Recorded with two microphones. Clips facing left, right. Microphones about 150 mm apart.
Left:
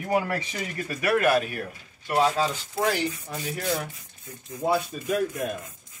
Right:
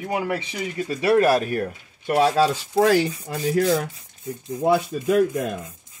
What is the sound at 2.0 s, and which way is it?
Speech, 65° right (ahead or behind).